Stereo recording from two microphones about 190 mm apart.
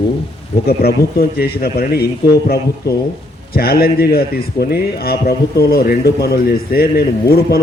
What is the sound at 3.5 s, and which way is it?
A man's voice, 55° left (ahead or behind).